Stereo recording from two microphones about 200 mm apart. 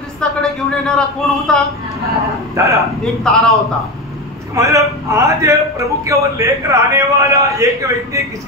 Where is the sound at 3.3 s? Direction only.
5° left (ahead or behind).